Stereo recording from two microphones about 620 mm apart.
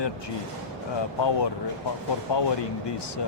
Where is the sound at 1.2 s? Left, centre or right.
Left.